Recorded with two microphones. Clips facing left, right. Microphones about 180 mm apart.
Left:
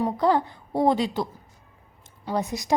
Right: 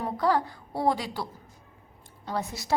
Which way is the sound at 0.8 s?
25° left (ahead or behind).